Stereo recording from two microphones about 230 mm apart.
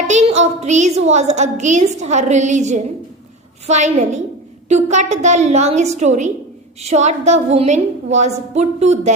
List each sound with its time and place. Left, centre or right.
0.1 s a woman's voice: right